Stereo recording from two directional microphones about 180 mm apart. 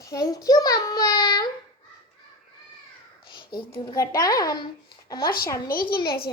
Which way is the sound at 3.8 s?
20° left (ahead or behind).